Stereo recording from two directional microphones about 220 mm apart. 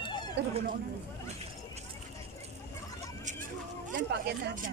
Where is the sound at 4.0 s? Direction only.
45° right (ahead or behind).